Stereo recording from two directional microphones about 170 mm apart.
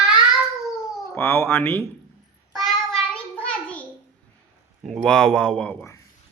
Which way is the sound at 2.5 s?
Centre (ahead or behind).